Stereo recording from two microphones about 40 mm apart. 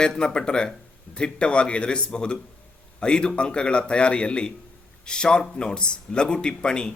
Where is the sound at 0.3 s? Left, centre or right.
Left.